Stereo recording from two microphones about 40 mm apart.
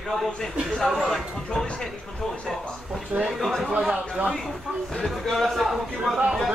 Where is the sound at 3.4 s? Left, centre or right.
Centre.